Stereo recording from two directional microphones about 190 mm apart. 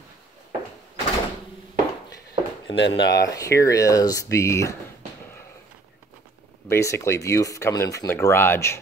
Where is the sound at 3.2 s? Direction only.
15° left (ahead or behind).